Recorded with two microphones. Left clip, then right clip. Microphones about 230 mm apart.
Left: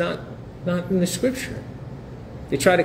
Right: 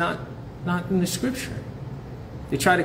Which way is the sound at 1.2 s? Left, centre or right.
Right.